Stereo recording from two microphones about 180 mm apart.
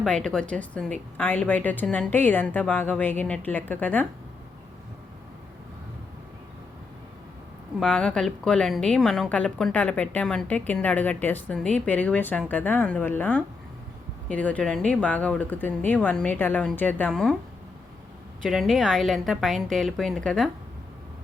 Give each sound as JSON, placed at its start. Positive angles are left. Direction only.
{"t": 0.0, "sound": "a woman's voice", "side_deg": 5}
{"t": 7.8, "sound": "a woman's voice", "side_deg": 5}
{"t": 18.4, "sound": "a woman's voice", "side_deg": 0}